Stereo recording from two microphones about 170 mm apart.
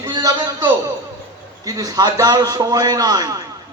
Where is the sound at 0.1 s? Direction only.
25° right (ahead or behind).